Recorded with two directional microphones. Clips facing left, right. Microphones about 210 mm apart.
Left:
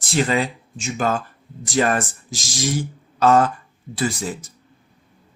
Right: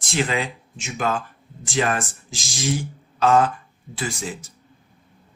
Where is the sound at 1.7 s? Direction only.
45° left (ahead or behind).